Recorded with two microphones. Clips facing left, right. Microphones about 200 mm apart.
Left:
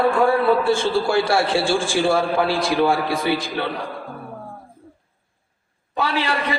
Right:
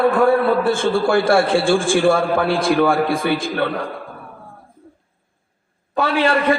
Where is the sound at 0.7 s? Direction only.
55° right (ahead or behind).